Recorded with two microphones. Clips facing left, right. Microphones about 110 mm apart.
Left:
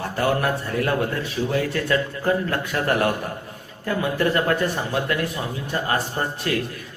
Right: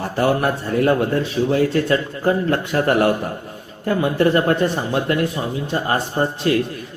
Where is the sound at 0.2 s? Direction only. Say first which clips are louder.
Right 4 dB; 25° right (ahead or behind).